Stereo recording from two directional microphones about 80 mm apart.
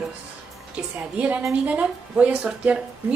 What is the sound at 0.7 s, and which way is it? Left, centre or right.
A woman's voice, centre.